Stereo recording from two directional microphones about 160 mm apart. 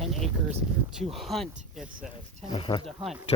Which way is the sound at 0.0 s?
Centre (ahead or behind).